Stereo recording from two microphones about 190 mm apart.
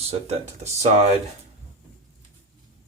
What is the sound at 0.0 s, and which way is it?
Speech, 35° right (ahead or behind).